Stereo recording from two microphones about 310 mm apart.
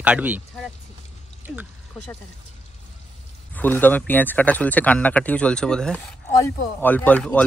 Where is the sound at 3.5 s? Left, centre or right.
Centre.